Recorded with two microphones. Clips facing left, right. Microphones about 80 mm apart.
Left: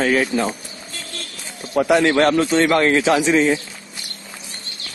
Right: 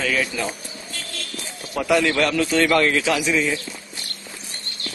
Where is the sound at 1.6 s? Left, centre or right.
Left.